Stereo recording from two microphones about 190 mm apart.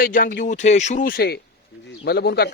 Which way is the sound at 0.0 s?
45° left (ahead or behind).